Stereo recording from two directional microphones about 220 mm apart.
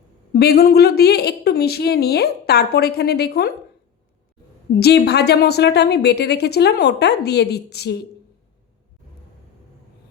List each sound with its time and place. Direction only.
0.3 s a woman's voice: 45° left (ahead or behind)
4.7 s a woman's voice: 50° left (ahead or behind)